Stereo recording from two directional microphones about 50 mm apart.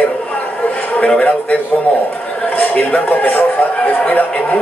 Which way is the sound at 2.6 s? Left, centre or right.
Left.